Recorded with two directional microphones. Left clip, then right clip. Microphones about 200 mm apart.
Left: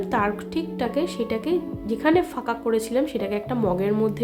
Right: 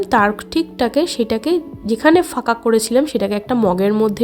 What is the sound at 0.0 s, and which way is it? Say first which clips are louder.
A woman's voice: right 9 dB; 50° right (ahead or behind).